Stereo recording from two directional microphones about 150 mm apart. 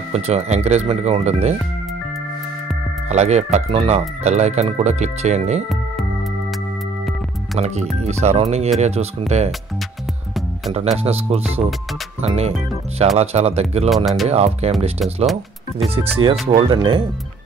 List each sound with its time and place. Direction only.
0.1 s speech: 45° right (ahead or behind)
3.1 s speech: 50° right (ahead or behind)
7.5 s speech: 45° right (ahead or behind)
11.0 s speech: 40° right (ahead or behind)
13.8 s speech: centre (ahead or behind)
14.3 s speech: 45° right (ahead or behind)
15.9 s speech: 40° right (ahead or behind)